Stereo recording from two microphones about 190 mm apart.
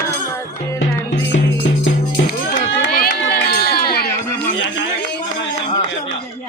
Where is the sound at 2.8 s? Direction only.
50° left (ahead or behind).